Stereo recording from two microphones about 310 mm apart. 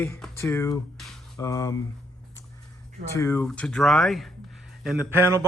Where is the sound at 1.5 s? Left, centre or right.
Centre.